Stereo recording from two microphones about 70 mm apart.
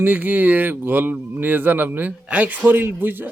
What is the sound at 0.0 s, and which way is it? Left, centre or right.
A man's voice, right.